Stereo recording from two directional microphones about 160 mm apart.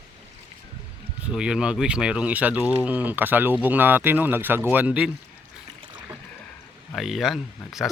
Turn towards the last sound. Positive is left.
turn(degrees=0)  # may be behind; listen again after turning